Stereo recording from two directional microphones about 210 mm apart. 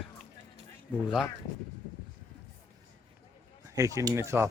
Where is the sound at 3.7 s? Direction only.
15° right (ahead or behind).